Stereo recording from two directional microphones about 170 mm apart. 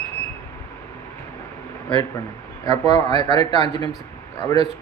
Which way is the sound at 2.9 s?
25° left (ahead or behind).